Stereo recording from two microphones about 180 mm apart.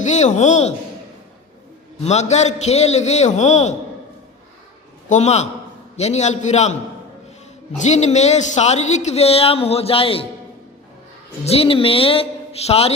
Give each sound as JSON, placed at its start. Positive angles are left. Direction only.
{"t": 0.0, "sound": "a woman's voice", "side_deg": 40}
{"t": 2.0, "sound": "a woman's voice", "side_deg": 40}
{"t": 5.0, "sound": "a woman's voice", "side_deg": 40}
{"t": 7.8, "sound": "a woman's voice", "side_deg": 40}
{"t": 11.4, "sound": "a woman's voice", "side_deg": 35}